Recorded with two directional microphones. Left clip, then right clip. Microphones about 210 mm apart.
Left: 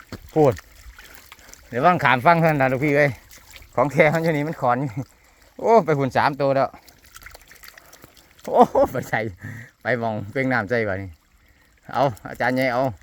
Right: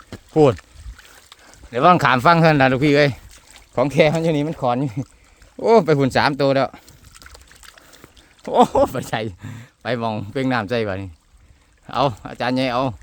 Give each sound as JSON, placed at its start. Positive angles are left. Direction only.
{"t": 1.7, "sound": "speech", "side_deg": -45}
{"t": 3.8, "sound": "speech", "side_deg": -35}
{"t": 4.2, "sound": "speech", "side_deg": -5}
{"t": 4.4, "sound": "speech", "side_deg": -35}
{"t": 5.7, "sound": "speech", "side_deg": -50}
{"t": 8.4, "sound": "speech", "side_deg": -20}